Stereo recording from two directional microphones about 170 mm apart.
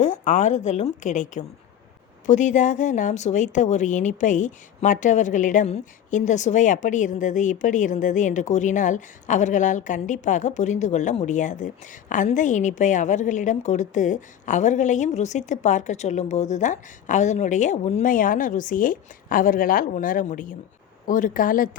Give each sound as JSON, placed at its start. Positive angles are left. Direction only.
{"t": 0.0, "sound": "speech", "side_deg": 45}